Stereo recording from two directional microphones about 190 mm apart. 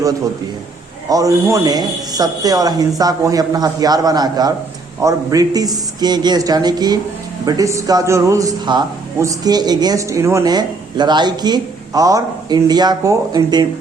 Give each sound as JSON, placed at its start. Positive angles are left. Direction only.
{"t": 1.1, "sound": "a man's voice", "side_deg": -15}